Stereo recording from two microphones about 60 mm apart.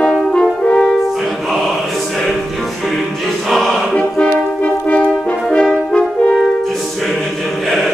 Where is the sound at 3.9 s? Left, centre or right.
Centre.